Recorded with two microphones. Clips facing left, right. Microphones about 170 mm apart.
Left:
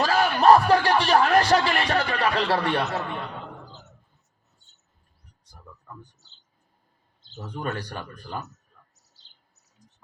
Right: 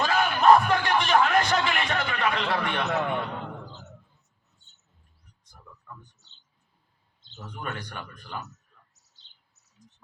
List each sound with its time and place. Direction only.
0.0 s music: 35° left (ahead or behind)
5.9 s speech: 40° left (ahead or behind)
7.3 s speech: 35° left (ahead or behind)